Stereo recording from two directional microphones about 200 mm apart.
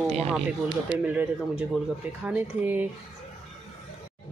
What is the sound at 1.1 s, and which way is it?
Speech, 10° right (ahead or behind).